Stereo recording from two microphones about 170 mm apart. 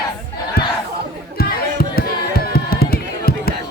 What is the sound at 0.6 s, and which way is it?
Crowd, 65° left (ahead or behind).